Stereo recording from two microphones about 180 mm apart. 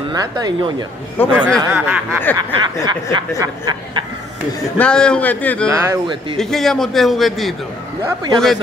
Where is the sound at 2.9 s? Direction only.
25° right (ahead or behind).